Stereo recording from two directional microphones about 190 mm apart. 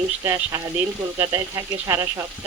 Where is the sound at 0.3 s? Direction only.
15° right (ahead or behind).